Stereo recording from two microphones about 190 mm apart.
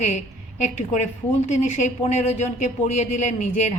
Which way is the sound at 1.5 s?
40° left (ahead or behind).